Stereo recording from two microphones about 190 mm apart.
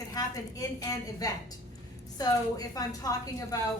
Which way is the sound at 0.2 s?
20° left (ahead or behind).